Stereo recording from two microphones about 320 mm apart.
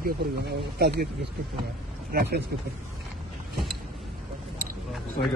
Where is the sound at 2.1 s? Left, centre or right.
Right.